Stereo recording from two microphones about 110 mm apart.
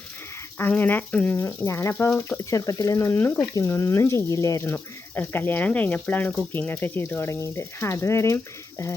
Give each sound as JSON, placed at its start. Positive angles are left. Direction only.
{"t": 0.6, "sound": "speech", "side_deg": 15}
{"t": 1.4, "sound": "speech", "side_deg": 25}